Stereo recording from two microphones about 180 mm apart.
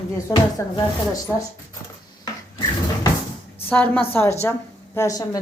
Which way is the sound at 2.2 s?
20° left (ahead or behind).